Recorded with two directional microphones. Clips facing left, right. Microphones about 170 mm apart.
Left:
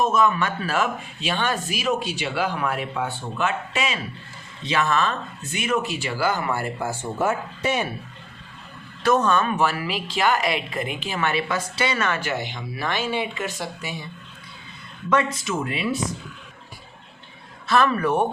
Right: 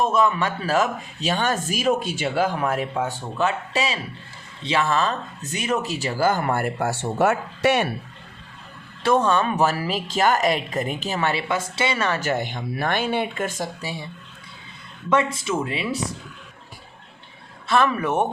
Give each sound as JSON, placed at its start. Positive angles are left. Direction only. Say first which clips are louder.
{"t": 0.0, "sound": "speech", "louder": "even", "side_deg": -30}
{"t": 9.0, "sound": "speech", "louder": "even", "side_deg": -30}
{"t": 13.8, "sound": "speech", "louder": "right 1 dB", "side_deg": -30}
{"t": 15.1, "sound": "speech", "louder": "right 1 dB", "side_deg": -25}
{"t": 17.7, "sound": "speech", "louder": "left 1 dB", "side_deg": -20}